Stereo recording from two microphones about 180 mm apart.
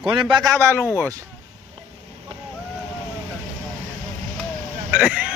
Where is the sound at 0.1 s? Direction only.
25° right (ahead or behind).